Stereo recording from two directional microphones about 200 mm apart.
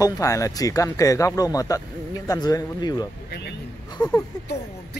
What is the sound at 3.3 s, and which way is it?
Vehicle, 55° left (ahead or behind).